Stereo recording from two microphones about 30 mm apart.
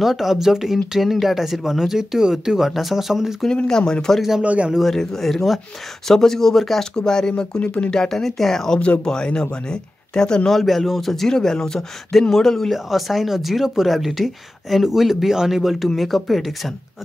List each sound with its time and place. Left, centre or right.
0.0 s speech: centre
3.6 s speech: left
4.4 s a man's voice: right
4.8 s speech: centre
5.3 s speech: centre
6.0 s speech: centre
6.8 s speech: left
7.6 s speech: left
8.1 s speech: centre
9.0 s speech: left
10.5 s speech: centre
11.2 s speech: centre
12.7 s speech: centre
16.0 s speech: centre